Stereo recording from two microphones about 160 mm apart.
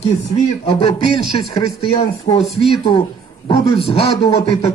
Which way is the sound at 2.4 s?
Centre (ahead or behind).